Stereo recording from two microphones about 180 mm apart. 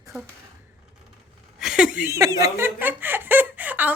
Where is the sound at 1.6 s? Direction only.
5° right (ahead or behind).